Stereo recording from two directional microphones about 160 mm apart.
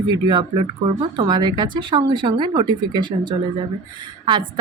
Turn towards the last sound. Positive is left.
turn(degrees=-30)  # may be behind; listen again after turning